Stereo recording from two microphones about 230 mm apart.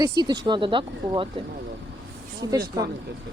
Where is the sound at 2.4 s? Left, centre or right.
Centre.